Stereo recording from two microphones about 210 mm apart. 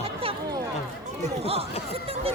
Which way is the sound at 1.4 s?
30° right (ahead or behind).